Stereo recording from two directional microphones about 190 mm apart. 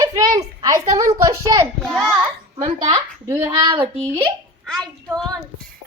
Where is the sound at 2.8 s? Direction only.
15° right (ahead or behind).